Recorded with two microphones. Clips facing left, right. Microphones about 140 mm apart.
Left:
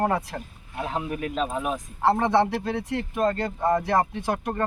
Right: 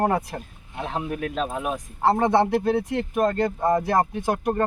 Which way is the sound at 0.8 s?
Centre (ahead or behind).